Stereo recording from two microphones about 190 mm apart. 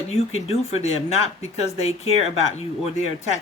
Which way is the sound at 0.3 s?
35° left (ahead or behind).